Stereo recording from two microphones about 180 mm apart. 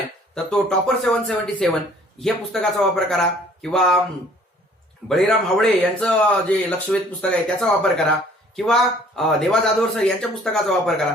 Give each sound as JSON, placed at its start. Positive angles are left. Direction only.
{"t": 0.3, "sound": "speech", "side_deg": 0}
{"t": 5.0, "sound": "speech", "side_deg": 5}